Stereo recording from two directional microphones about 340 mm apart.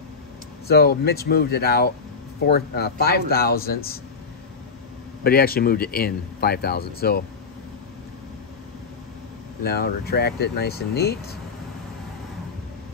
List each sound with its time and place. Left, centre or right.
0.7 s speech: left
5.2 s speech: left
9.6 s speech: left